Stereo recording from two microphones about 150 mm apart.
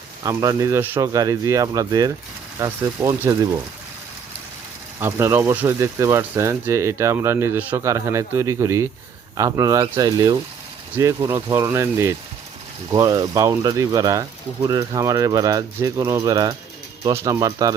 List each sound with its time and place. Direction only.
0.2 s speech: 25° right (ahead or behind)
4.9 s speech: 15° right (ahead or behind)